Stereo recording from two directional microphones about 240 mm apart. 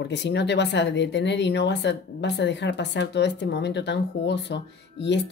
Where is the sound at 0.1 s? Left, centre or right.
Left.